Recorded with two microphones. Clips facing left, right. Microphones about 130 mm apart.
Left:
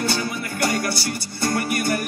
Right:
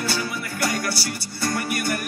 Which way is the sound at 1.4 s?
25° left (ahead or behind).